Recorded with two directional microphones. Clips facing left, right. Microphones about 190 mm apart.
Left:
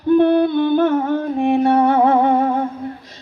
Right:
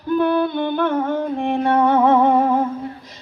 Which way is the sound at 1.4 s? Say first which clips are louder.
Left 8 dB; 5° left (ahead or behind).